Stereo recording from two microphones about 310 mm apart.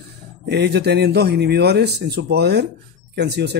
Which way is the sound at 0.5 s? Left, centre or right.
Right.